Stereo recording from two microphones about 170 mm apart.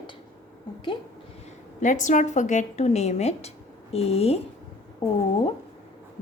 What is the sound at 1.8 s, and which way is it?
A woman's voice, 45° left (ahead or behind).